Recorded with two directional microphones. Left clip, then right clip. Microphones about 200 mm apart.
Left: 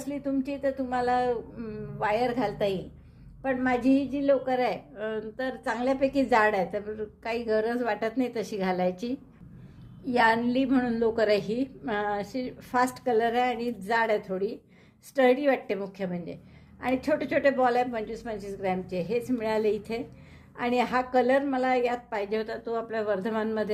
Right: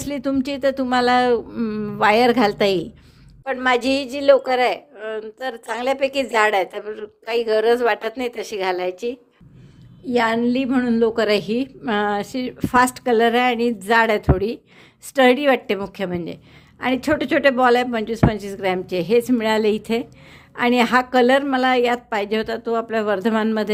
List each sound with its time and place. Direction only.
0.0 s speech: 45° right (ahead or behind)
4.5 s a woman's voice: 30° right (ahead or behind)
10.1 s a woman's voice: 15° right (ahead or behind); by 23.7 s 35° right (ahead or behind)